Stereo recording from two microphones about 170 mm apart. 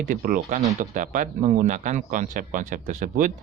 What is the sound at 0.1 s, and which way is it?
A man's voice, 55° right (ahead or behind).